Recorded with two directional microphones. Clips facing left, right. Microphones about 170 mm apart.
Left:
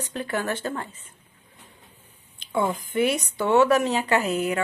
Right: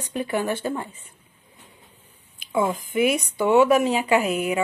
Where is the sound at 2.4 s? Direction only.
10° right (ahead or behind).